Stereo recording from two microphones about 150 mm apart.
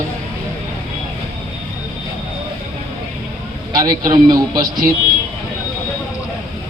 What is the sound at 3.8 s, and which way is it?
Speech, 25° right (ahead or behind).